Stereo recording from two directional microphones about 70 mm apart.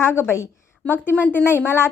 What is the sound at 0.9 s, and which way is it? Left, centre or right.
A woman's voice, left.